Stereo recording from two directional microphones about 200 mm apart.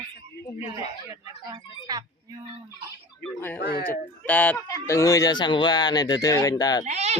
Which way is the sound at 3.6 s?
50° left (ahead or behind).